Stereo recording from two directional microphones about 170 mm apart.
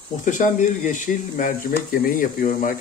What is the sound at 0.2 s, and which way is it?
Speech, 50° left (ahead or behind).